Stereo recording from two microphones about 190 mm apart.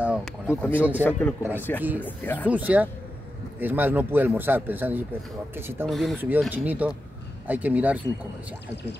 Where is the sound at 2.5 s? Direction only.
10° right (ahead or behind).